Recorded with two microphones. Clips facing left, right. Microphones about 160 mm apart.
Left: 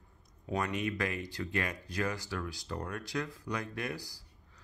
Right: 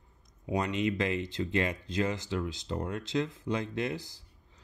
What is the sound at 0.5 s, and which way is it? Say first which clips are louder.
Speech: right 4 dB; 20° right (ahead or behind).